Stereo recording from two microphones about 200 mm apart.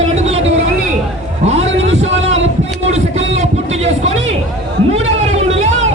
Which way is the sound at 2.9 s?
35° right (ahead or behind).